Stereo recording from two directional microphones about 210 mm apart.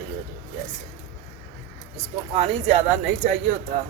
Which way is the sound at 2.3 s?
30° right (ahead or behind).